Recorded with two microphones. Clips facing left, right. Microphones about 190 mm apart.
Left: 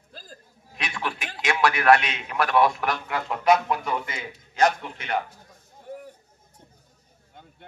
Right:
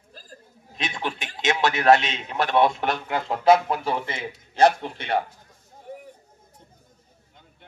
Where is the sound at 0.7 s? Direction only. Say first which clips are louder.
Right 2 dB; 20° right (ahead or behind).